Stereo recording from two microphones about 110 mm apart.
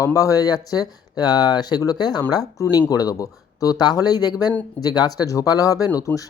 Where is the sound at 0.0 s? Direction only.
30° left (ahead or behind).